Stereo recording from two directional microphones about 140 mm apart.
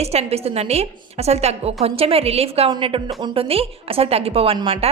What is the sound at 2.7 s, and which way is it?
A woman's voice, 35° right (ahead or behind).